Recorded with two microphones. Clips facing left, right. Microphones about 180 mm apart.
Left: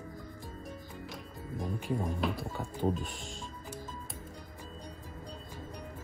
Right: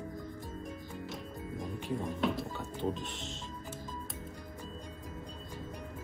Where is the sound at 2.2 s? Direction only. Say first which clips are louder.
Right 1 dB; centre (ahead or behind).